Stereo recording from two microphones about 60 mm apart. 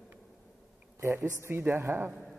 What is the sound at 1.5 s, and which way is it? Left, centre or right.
Speech, right.